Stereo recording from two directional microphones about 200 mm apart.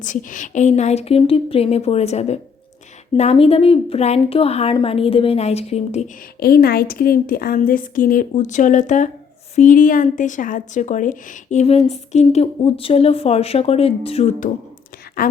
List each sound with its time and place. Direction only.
0.0 s a woman's voice: 40° left (ahead or behind)
6.4 s a woman's voice: 50° left (ahead or behind)